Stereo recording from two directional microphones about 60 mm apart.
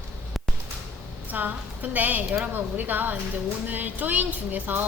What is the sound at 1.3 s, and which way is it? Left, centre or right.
A woman's voice, right.